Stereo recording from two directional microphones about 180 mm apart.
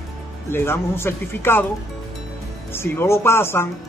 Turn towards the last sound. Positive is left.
turn(degrees=15)  # may be behind; listen again after turning